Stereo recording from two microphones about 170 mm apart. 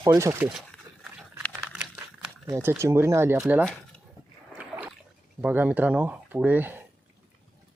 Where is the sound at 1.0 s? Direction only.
5° right (ahead or behind).